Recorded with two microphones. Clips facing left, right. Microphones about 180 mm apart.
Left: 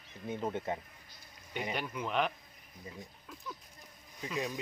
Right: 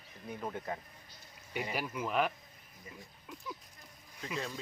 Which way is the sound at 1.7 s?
5° right (ahead or behind).